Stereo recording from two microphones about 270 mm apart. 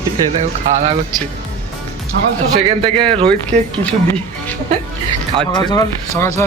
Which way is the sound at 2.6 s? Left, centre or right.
Centre.